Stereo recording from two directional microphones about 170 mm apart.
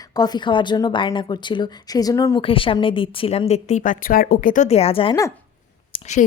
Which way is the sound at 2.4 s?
30° left (ahead or behind).